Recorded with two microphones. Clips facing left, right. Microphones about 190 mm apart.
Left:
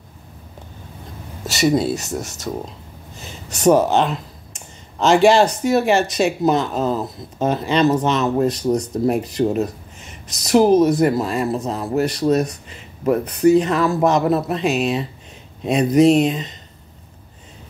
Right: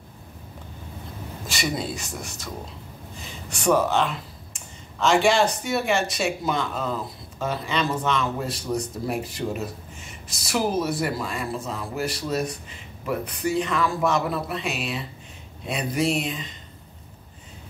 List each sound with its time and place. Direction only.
1.5 s speech: 40° left (ahead or behind)
3.8 s speech: 35° left (ahead or behind)